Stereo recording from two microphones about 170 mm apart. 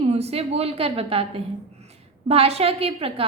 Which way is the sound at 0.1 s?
35° right (ahead or behind).